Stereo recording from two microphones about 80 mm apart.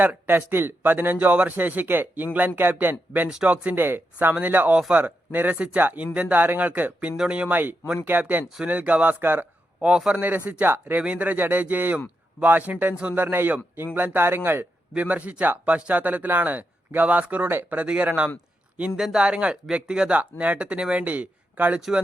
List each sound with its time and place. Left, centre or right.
0.0 s a man's voice: right
9.8 s a man's voice: centre
21.8 s speech: centre